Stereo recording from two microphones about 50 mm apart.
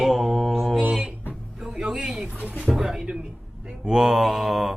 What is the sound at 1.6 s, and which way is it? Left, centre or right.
Speech, centre.